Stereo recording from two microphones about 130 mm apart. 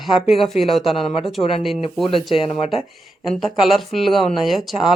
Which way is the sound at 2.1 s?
45° left (ahead or behind).